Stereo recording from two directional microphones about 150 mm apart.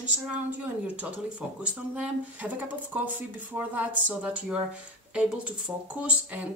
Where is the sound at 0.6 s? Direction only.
10° right (ahead or behind).